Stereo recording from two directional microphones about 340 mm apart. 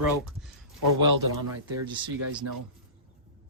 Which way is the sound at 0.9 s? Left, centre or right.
Right.